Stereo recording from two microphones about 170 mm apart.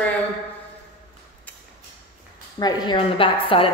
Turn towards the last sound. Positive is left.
turn(degrees=30)  # may be behind; listen again after turning